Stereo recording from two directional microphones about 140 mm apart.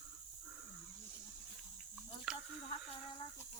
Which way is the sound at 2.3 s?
5° right (ahead or behind).